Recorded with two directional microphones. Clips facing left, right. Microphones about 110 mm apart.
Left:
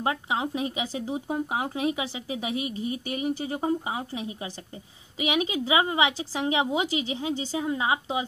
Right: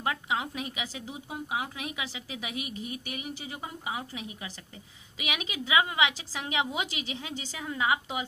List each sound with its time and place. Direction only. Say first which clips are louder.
0.0 s a woman's voice: left 4 dB; 30° left (ahead or behind)